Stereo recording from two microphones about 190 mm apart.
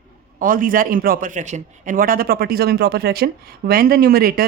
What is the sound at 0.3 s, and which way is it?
A man's voice, 45° right (ahead or behind).